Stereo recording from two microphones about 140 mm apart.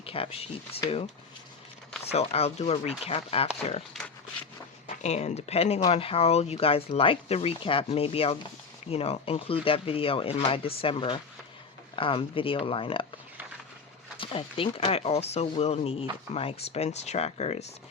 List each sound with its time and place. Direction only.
0.0 s speech: 40° left (ahead or behind)
2.1 s speech: 50° left (ahead or behind)
4.9 s speech: 50° left (ahead or behind)
14.2 s speech: 40° left (ahead or behind)